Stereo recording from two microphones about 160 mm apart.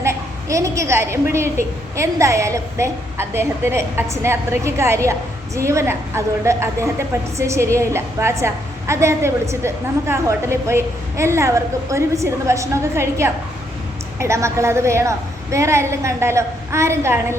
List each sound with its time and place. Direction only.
0.0 s a woman's voice: 20° right (ahead or behind)